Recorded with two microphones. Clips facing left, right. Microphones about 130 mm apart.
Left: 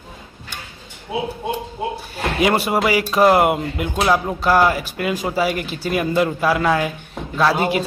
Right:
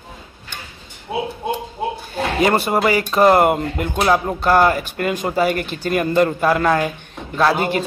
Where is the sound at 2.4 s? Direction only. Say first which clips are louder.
Right 1 dB; 5° left (ahead or behind).